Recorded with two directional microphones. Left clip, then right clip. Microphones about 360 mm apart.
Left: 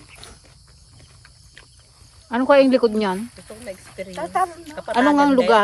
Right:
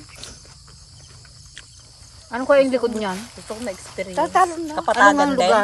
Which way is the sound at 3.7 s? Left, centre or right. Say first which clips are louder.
Right 3 dB; centre.